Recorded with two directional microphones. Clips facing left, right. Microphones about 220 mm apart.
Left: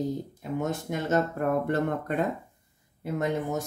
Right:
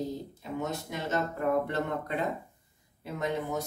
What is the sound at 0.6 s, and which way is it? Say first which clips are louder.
Speech: left 4 dB; 50° left (ahead or behind).